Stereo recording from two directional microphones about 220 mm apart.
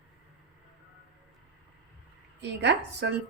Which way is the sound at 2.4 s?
50° right (ahead or behind).